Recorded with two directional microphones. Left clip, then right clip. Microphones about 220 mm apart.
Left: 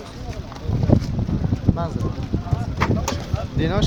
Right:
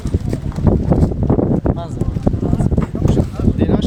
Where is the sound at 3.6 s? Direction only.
5° right (ahead or behind).